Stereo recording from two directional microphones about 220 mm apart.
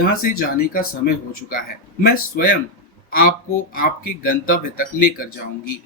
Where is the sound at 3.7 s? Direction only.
40° left (ahead or behind).